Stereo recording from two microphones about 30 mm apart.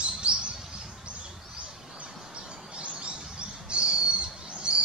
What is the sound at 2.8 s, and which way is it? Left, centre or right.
Bird, right.